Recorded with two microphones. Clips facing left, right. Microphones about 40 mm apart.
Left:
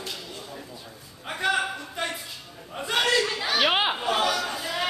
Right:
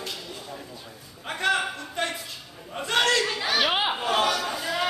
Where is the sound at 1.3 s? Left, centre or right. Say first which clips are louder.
Even; centre.